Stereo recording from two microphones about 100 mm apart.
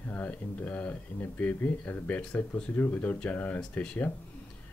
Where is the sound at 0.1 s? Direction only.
15° left (ahead or behind).